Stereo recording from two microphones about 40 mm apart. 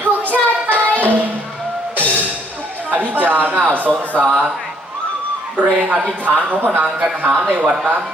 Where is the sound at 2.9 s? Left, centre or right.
Right.